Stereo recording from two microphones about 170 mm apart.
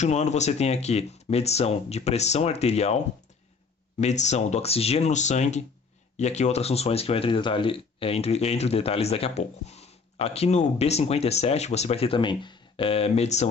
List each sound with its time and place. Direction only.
0.0 s speech: 40° left (ahead or behind)
4.0 s speech: 40° left (ahead or behind)